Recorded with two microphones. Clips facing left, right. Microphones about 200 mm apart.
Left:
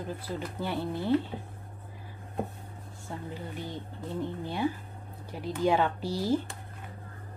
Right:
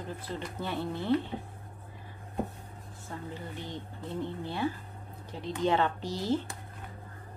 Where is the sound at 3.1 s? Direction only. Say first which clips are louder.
Left 2 dB; 20° left (ahead or behind).